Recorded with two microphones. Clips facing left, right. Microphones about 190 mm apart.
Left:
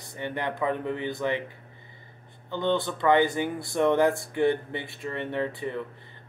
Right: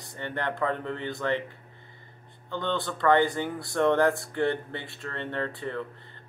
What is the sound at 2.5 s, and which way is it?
Speech, 20° left (ahead or behind).